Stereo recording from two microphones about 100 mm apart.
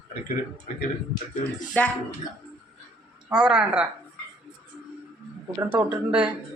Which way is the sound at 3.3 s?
10° right (ahead or behind).